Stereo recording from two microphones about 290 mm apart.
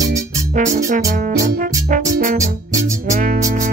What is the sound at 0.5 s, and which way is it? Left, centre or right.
Music, right.